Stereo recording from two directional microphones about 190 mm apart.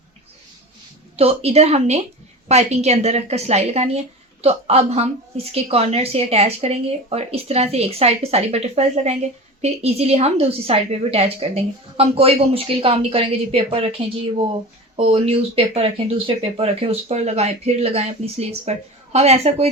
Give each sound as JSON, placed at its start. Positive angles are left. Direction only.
{"t": 1.1, "sound": "a woman's voice", "side_deg": -30}